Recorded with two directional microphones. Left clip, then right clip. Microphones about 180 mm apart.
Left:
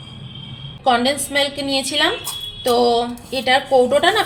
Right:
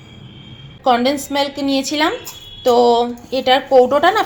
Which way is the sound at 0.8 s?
30° right (ahead or behind).